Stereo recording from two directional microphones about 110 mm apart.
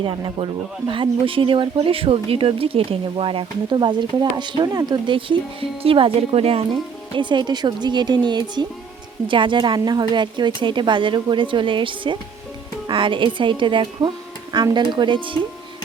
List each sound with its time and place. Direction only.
0.0 s speech: 50° right (ahead or behind); by 6.7 s 65° right (ahead or behind)
7.1 s speech: 45° right (ahead or behind)